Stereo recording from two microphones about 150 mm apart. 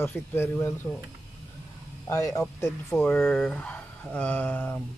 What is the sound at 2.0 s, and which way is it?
Speech, 20° left (ahead or behind).